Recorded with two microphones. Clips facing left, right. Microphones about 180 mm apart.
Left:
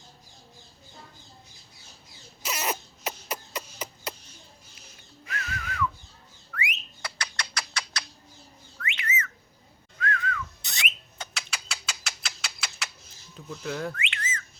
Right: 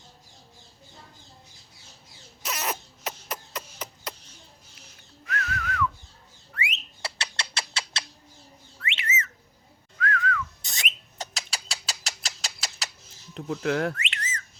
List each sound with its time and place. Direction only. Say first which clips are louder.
2.4 s rodents: left 1 dB; centre (ahead or behind)
5.2 s whistling: right 4 dB; centre (ahead or behind)
7.0 s bird: right 1 dB; 25° right (ahead or behind)
8.8 s whistling: even; 25° right (ahead or behind)
10.0 s whistling: right 3 dB; 25° left (ahead or behind)
10.6 s a sound: left 1 dB; 40° right (ahead or behind)
13.3 s speech: right 7 dB; 70° right (ahead or behind)
13.9 s whistling: left 1 dB; 40° right (ahead or behind)